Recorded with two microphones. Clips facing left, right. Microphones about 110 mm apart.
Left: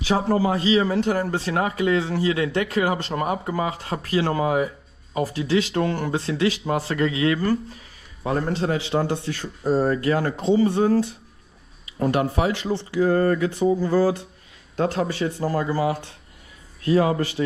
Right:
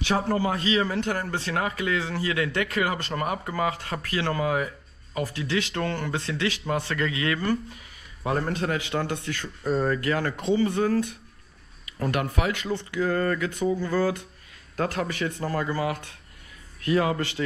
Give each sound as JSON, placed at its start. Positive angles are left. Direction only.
{"t": 0.2, "sound": "a man's voice", "side_deg": 30}
{"t": 12.6, "sound": "a man's voice", "side_deg": 30}